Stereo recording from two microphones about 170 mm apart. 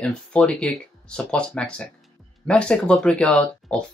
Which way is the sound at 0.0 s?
5° left (ahead or behind).